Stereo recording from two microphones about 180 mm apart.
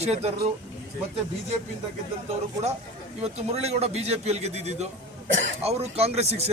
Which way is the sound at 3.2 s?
35° right (ahead or behind).